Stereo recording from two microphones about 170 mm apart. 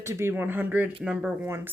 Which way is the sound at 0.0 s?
15° right (ahead or behind).